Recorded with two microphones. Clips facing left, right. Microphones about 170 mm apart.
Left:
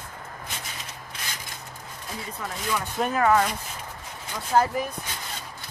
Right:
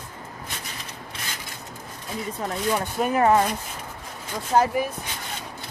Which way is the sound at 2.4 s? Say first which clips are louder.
Right 5 dB; 35° right (ahead or behind).